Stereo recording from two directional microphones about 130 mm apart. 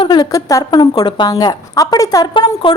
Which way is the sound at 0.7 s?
35° left (ahead or behind).